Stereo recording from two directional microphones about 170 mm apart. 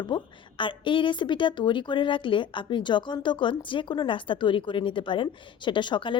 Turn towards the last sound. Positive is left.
turn(degrees=30)  # may be behind; listen again after turning